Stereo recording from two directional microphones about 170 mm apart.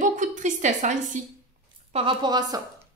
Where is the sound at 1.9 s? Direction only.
30° right (ahead or behind).